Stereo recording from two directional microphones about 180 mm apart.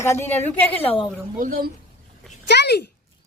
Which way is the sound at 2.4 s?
70° left (ahead or behind).